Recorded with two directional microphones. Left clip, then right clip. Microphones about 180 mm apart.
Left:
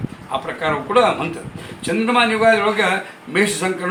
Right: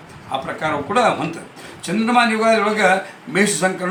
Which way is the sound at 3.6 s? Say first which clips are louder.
Right 2 dB; 10° right (ahead or behind).